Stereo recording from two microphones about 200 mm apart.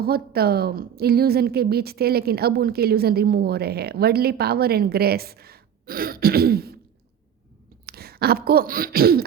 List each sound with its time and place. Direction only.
0.0 s a woman's voice: 50° right (ahead or behind)
7.9 s speech: 50° right (ahead or behind)